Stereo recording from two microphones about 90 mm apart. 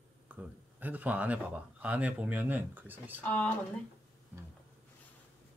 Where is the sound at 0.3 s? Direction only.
20° right (ahead or behind).